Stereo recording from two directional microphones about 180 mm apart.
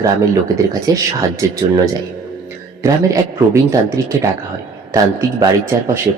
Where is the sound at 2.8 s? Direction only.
20° right (ahead or behind).